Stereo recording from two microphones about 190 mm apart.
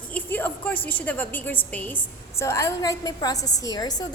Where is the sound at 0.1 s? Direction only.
10° left (ahead or behind).